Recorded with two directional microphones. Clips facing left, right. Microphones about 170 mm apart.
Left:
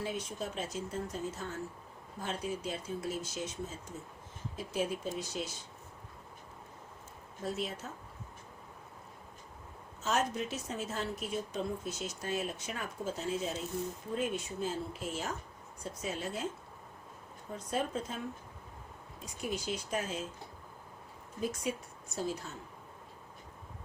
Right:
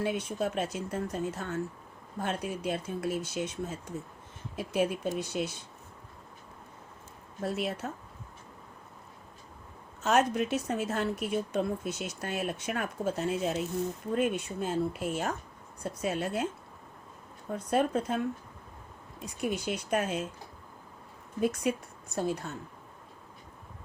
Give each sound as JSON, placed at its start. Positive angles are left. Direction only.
{"t": 0.0, "sound": "speech", "side_deg": -65}
{"t": 7.4, "sound": "speech", "side_deg": -65}
{"t": 10.0, "sound": "speech", "side_deg": -65}
{"t": 17.5, "sound": "speech", "side_deg": -60}
{"t": 19.2, "sound": "speech", "side_deg": -60}
{"t": 21.4, "sound": "speech", "side_deg": -65}